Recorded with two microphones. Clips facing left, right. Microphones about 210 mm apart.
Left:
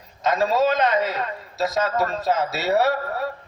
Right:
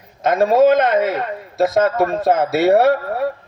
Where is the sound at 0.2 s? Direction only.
55° right (ahead or behind).